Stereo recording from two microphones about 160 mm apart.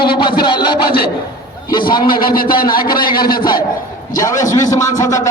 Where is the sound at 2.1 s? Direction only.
65° left (ahead or behind).